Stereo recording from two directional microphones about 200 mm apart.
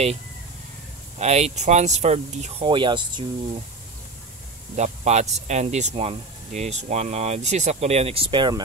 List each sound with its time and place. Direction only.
1.1 s speech: 35° right (ahead or behind)
4.7 s speech: 35° right (ahead or behind)